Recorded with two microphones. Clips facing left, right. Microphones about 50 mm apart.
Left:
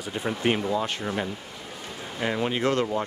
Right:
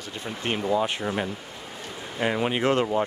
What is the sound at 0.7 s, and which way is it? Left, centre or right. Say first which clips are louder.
Speech: right 2 dB; centre.